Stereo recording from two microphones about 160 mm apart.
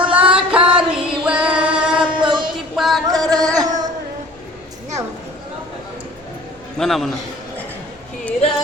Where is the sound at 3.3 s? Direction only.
25° right (ahead or behind).